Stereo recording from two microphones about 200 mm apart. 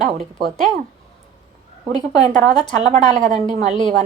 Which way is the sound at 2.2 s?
35° right (ahead or behind).